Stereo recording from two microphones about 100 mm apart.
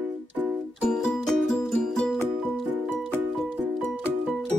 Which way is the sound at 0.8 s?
5° left (ahead or behind).